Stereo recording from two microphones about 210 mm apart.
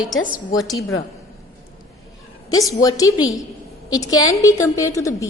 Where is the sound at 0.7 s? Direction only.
15° left (ahead or behind).